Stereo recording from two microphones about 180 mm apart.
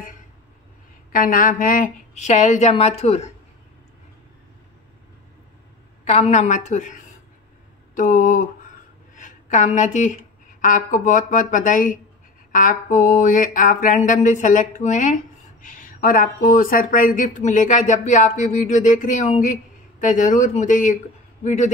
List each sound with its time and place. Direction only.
1.1 s a woman's voice: 50° left (ahead or behind)
6.0 s a woman's voice: 40° left (ahead or behind)